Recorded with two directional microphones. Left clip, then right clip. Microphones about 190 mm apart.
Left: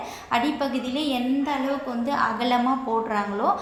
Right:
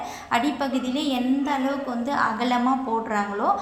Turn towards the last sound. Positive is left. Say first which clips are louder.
# even
turn(degrees=-10)  # may be behind; listen again after turning